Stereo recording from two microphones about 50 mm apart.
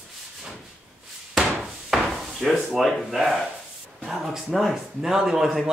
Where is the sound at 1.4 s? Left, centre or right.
Centre.